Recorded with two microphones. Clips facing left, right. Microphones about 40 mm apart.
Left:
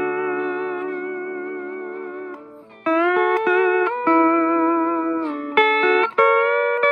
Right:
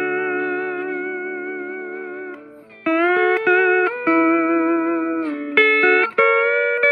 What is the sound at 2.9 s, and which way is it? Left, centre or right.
Music, centre.